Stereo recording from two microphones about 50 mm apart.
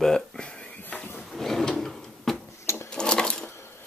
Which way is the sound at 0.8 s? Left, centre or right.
Left.